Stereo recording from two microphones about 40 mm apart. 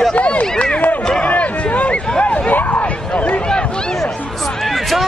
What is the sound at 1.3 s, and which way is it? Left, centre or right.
Speech, left.